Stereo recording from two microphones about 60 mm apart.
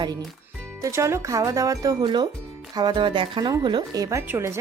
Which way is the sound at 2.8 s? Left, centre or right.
Right.